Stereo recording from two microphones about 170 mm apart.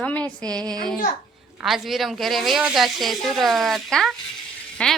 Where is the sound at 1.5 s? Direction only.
Centre (ahead or behind).